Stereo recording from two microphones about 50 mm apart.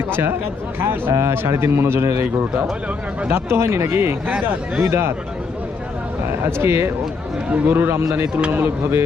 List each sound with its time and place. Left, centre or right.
0.1 s speech: right
1.1 s a man's voice: right
3.3 s a man's voice: right
6.4 s a man's voice: right
7.5 s a man's voice: right
8.5 s speech: right